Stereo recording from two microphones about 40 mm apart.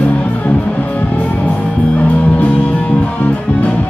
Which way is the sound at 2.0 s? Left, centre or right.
Left.